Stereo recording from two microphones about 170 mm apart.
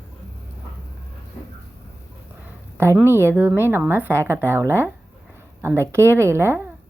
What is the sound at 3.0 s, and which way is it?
Speech, 15° right (ahead or behind).